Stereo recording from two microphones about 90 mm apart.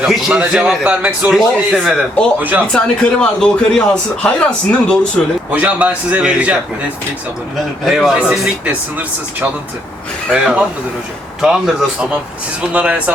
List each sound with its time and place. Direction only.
0.0 s a man's voice: 10° right (ahead or behind)
2.4 s speech: 20° right (ahead or behind)
2.7 s a man's voice: 10° left (ahead or behind)
5.5 s speech: 15° right (ahead or behind)
7.9 s speech: 5° right (ahead or behind)
12.7 s speech: 15° right (ahead or behind)